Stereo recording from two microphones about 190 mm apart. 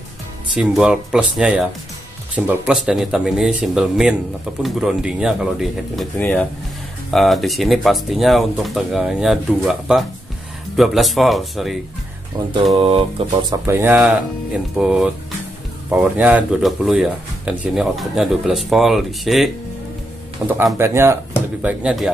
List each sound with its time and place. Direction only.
0.6 s speech: 5° right (ahead or behind)
6.1 s speech: 10° left (ahead or behind)
7.1 s speech: centre (ahead or behind)
12.4 s mantra: 20° right (ahead or behind)
13.5 s speech: 15° right (ahead or behind)
21.6 s speech: 5° right (ahead or behind)